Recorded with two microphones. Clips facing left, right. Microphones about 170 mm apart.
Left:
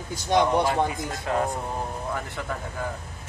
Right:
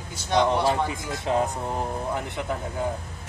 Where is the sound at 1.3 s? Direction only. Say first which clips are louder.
Right 2 dB; 25° right (ahead or behind).